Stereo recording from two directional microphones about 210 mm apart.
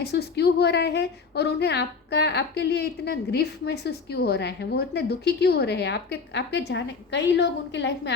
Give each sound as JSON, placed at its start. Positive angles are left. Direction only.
{"t": 0.0, "sound": "a woman's voice", "side_deg": 50}